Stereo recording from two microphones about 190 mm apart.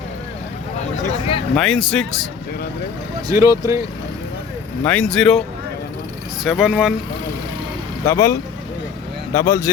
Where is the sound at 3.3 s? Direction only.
15° right (ahead or behind).